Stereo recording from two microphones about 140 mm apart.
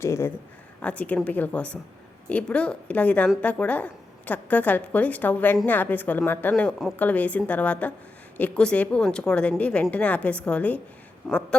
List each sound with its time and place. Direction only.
0.0 s a woman's voice: 20° left (ahead or behind)
11.2 s speech: centre (ahead or behind)